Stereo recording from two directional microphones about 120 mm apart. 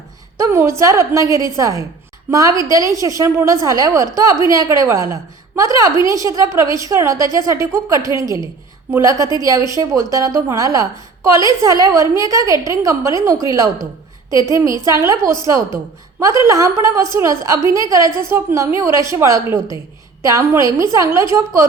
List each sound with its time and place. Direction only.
0.3 s a woman's voice: 25° right (ahead or behind)